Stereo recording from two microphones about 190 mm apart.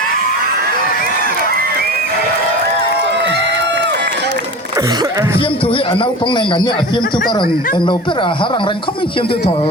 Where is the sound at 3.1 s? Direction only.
65° right (ahead or behind).